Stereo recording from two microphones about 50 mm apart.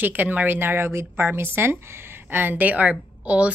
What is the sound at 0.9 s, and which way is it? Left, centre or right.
A woman's voice, right.